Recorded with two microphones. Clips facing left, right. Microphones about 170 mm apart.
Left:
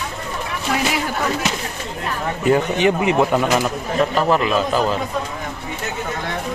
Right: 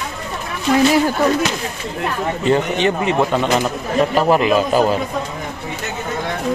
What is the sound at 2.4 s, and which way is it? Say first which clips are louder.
A man's voice: left 1 dB; 10° left (ahead or behind).